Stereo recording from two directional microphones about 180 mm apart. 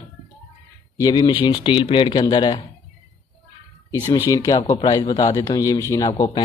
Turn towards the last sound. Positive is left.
turn(degrees=20)  # may be behind; listen again after turning